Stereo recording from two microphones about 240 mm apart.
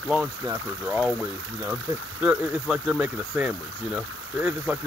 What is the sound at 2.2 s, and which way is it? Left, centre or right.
Speech, centre.